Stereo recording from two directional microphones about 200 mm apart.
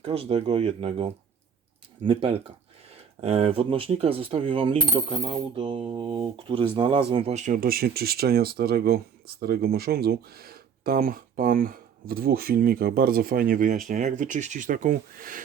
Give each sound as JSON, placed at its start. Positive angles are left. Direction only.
{"t": 0.0, "sound": "speech", "side_deg": -30}
{"t": 3.2, "sound": "coin", "side_deg": -30}